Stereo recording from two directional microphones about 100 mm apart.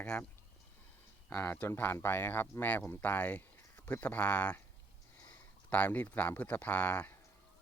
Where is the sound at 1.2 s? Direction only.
15° left (ahead or behind).